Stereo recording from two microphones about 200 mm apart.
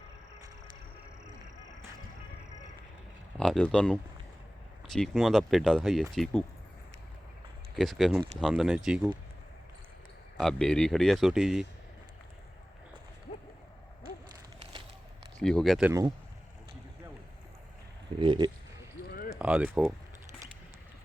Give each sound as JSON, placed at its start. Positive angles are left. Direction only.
{"t": 3.3, "sound": "speech", "side_deg": 0}
{"t": 7.8, "sound": "speech", "side_deg": 0}
{"t": 10.3, "sound": "speech", "side_deg": 0}
{"t": 15.4, "sound": "speech", "side_deg": 0}
{"t": 15.9, "sound": "speech", "side_deg": -15}
{"t": 18.2, "sound": "speech", "side_deg": -25}
{"t": 19.4, "sound": "speech", "side_deg": -5}